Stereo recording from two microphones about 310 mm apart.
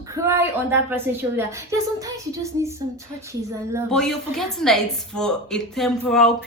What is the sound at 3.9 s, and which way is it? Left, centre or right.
A woman's voice, centre.